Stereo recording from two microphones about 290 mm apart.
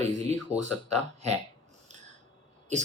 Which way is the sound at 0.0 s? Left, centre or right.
Right.